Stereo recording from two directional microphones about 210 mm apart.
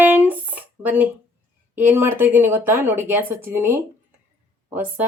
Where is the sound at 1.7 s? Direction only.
10° right (ahead or behind).